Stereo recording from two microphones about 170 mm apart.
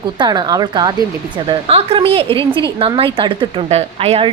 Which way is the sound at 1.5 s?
35° right (ahead or behind).